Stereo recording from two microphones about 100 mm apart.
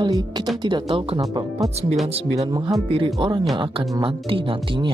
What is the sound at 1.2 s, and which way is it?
Speech, 35° right (ahead or behind).